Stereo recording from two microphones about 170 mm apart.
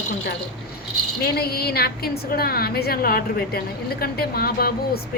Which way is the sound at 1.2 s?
65° left (ahead or behind).